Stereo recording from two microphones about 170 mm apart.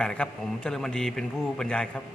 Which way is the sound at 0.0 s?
5° left (ahead or behind).